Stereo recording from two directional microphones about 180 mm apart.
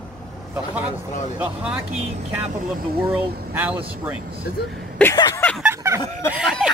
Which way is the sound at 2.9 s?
10° right (ahead or behind).